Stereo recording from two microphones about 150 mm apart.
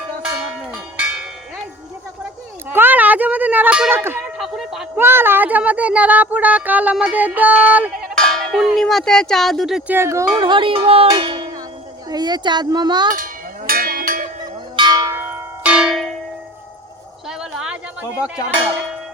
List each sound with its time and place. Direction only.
2.6 s a sound: 10° right (ahead or behind)
4.4 s speech: centre (ahead or behind)
4.9 s speech: 15° right (ahead or behind)
8.1 s speech: 5° left (ahead or behind)
9.9 s speech: 15° right (ahead or behind)
10.3 s music: 30° right (ahead or behind)
12.0 s speech: 30° right (ahead or behind)
13.1 s cowbell: 65° right (ahead or behind)
14.8 s church bell: 25° right (ahead or behind); by 16.1 s centre (ahead or behind)
17.2 s a sound: 5° right (ahead or behind)